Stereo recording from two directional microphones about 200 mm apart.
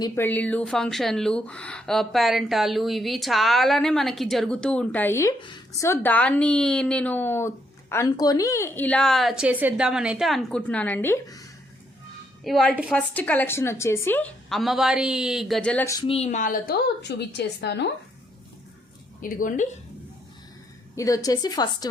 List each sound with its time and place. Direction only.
0.0 s speech: 10° left (ahead or behind)
5.4 s speech: 25° left (ahead or behind)
5.9 s a woman's voice: 10° left (ahead or behind)
12.5 s a woman's voice: centre (ahead or behind)
16.0 s a woman's voice: 30° left (ahead or behind); by 17.9 s 60° left (ahead or behind)
19.2 s speech: 40° left (ahead or behind)
20.9 s a woman's voice: 15° left (ahead or behind)